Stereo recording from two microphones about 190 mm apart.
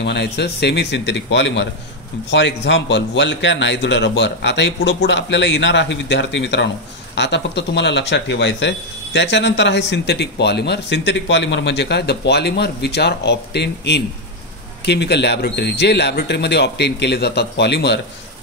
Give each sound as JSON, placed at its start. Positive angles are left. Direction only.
{"t": 0.0, "sound": "a man's voice", "side_deg": 60}